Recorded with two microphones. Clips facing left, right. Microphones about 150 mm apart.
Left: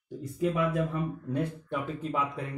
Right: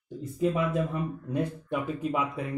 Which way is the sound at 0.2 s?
25° right (ahead or behind).